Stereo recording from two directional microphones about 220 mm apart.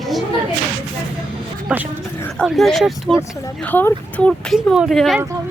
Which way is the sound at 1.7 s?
5° right (ahead or behind).